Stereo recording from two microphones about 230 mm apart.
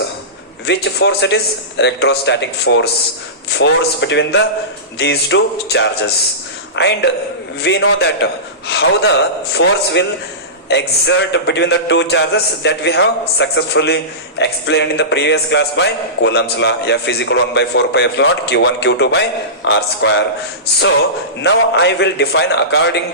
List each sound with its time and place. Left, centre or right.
0.6 s a man's voice: left
21.4 s a man's voice: left